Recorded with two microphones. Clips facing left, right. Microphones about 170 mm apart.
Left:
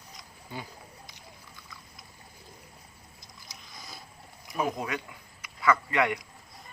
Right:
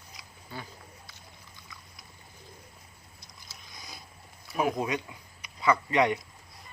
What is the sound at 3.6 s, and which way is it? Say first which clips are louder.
Boat: left 1 dB; centre (ahead or behind).